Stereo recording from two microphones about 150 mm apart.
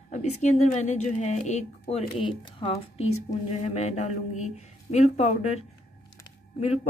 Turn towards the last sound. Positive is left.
turn(degrees=45)  # may be behind; listen again after turning